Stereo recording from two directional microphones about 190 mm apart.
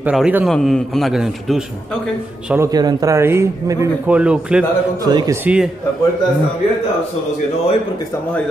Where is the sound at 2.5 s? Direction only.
15° right (ahead or behind).